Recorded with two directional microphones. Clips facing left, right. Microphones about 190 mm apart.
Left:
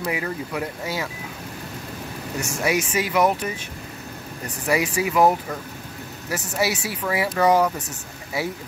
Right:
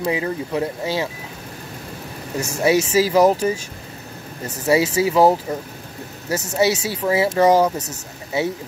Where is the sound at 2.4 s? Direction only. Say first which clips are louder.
Right 6 dB; 25° right (ahead or behind).